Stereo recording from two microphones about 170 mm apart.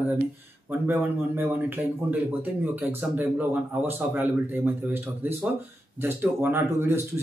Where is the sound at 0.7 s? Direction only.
10° right (ahead or behind).